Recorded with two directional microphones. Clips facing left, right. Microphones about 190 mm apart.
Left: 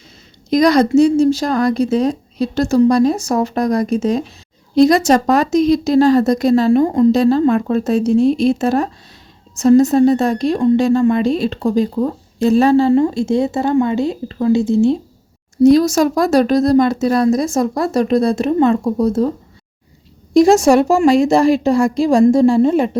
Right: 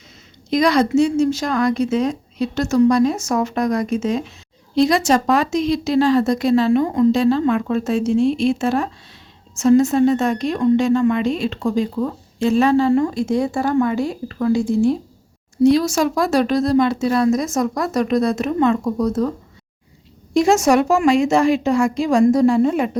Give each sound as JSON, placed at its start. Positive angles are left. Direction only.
{"t": 0.5, "sound": "a woman's voice", "side_deg": 40}
{"t": 15.6, "sound": "a woman's voice", "side_deg": 40}
{"t": 20.3, "sound": "a woman's voice", "side_deg": 35}